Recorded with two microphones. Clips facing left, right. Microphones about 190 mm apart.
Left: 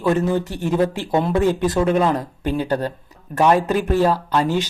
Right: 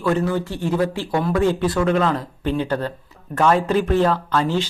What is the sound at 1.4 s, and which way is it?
Speech, 10° left (ahead or behind).